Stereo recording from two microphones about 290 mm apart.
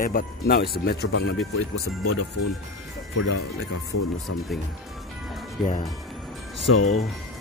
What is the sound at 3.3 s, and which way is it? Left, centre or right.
Speech, left.